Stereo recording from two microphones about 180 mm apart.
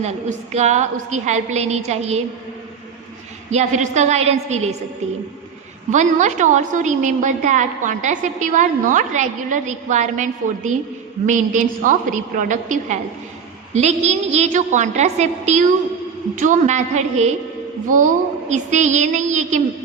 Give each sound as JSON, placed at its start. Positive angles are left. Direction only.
{"t": 0.0, "sound": "a woman's voice", "side_deg": -40}
{"t": 3.5, "sound": "a woman's voice", "side_deg": -40}
{"t": 5.9, "sound": "a woman's voice", "side_deg": -40}